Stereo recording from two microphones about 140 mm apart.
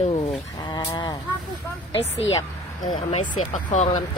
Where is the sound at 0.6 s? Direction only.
30° left (ahead or behind).